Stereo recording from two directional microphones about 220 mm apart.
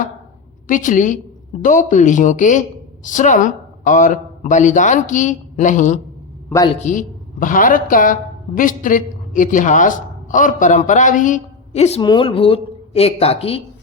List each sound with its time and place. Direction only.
0.7 s a woman's voice: 35° left (ahead or behind)